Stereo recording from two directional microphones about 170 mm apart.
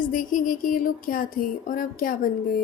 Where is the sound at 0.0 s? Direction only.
55° left (ahead or behind).